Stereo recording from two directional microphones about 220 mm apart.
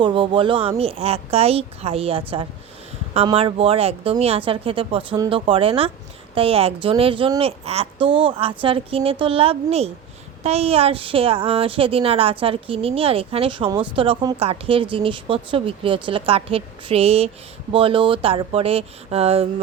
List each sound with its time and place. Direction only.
0.0 s a woman's voice: 20° right (ahead or behind)